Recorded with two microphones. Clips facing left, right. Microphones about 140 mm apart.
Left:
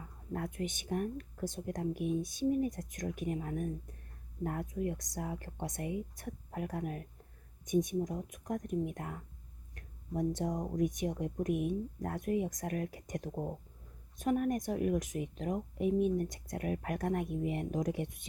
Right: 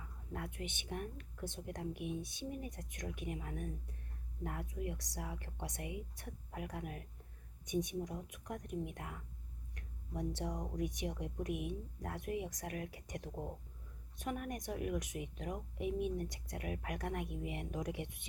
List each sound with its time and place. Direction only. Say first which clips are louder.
0.3 s speech: left 7 dB; 45° left (ahead or behind)